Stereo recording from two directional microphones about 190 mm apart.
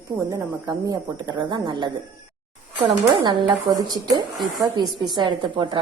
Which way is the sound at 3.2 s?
25° right (ahead or behind).